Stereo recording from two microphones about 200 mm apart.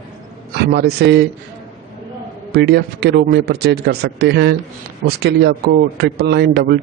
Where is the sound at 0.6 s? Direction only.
55° right (ahead or behind).